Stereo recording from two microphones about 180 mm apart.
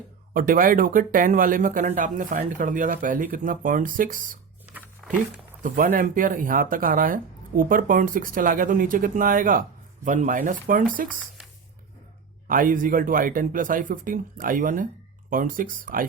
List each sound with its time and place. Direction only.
0.3 s speech: 50° right (ahead or behind)
4.6 s a sound: 10° right (ahead or behind)
5.6 s speech: 50° right (ahead or behind)
12.5 s speech: 50° right (ahead or behind)